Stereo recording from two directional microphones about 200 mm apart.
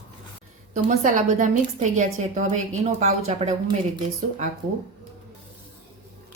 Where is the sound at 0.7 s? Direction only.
40° right (ahead or behind).